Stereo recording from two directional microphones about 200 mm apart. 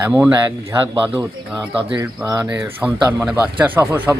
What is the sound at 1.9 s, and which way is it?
Speech, 15° right (ahead or behind).